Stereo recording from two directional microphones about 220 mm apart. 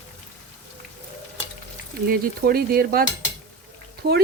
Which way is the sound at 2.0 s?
40° right (ahead or behind).